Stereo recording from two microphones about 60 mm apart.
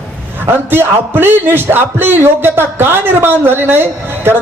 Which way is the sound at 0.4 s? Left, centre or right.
Right.